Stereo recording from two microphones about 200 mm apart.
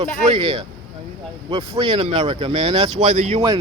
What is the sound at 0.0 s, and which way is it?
Speech, 25° right (ahead or behind).